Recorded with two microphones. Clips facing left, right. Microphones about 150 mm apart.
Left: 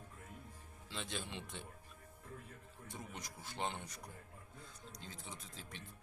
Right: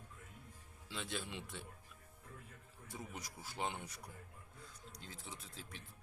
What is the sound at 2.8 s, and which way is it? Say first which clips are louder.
Speech: right 1 dB; 5° right (ahead or behind).